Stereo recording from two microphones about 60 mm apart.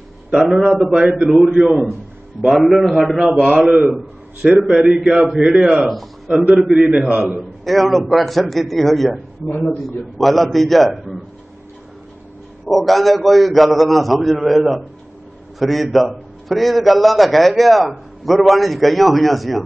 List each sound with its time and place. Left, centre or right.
0.3 s a man's voice: centre
6.9 s a man's voice: centre
12.6 s a man's voice: centre